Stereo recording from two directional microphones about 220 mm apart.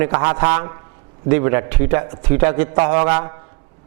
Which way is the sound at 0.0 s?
15° right (ahead or behind).